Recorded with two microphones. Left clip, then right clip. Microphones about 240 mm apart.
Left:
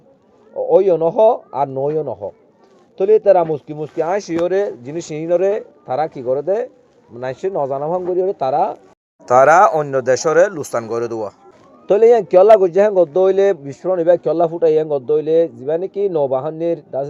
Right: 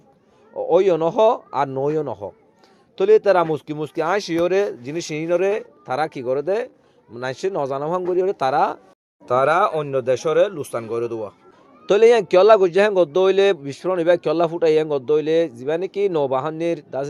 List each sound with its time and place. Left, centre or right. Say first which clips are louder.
0.5 s speech: left 4 dB; right
9.2 s speech: left 7 dB; centre
11.9 s speech: left 3 dB; centre
12.3 s speech: left 4 dB; right
13.1 s speech: left 3 dB; centre